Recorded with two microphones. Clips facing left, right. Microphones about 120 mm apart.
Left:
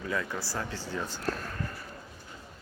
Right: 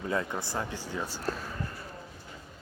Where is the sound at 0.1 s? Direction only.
25° right (ahead or behind); by 1.5 s 10° right (ahead or behind).